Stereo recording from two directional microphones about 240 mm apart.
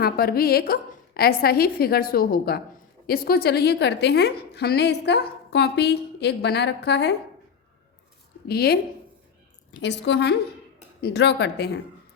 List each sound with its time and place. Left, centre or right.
0.0 s a woman's voice: left
8.4 s a woman's voice: left
9.8 s a woman's voice: left